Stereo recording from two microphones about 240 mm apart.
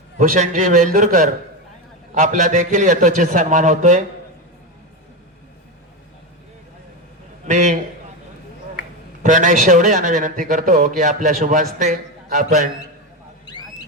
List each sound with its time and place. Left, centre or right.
0.2 s a man's voice: right
7.4 s a man's voice: right
9.2 s a man's voice: right
13.5 s a sound: centre